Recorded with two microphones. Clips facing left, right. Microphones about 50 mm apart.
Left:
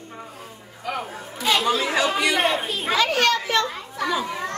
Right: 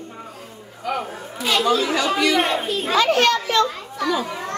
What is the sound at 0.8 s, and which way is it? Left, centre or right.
Chatter, centre.